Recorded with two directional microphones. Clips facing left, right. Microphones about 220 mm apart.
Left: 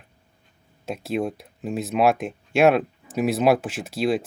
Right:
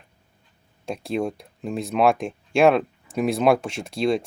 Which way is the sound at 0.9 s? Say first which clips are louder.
Even; 5° left (ahead or behind).